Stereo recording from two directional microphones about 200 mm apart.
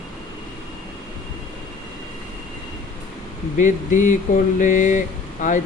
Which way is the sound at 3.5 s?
40° left (ahead or behind).